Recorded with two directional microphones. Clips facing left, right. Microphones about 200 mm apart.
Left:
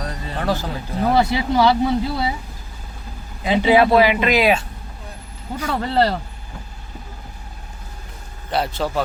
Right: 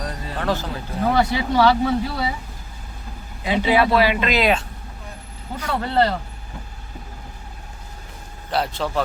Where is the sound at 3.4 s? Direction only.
20° left (ahead or behind).